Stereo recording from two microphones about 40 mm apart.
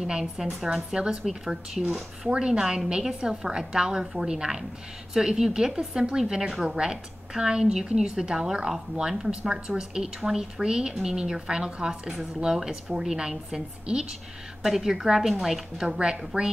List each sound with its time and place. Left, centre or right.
0.1 s a woman's voice: centre
14.6 s a woman's voice: centre
15.8 s a woman's voice: centre